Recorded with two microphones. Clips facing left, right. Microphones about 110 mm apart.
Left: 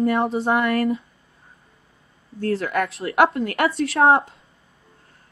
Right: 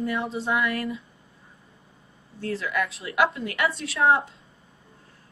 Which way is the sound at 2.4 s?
50° left (ahead or behind).